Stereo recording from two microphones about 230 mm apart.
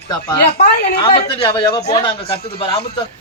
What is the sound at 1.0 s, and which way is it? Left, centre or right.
A man's voice, left.